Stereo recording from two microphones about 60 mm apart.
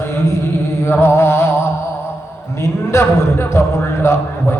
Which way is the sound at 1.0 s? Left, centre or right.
Left.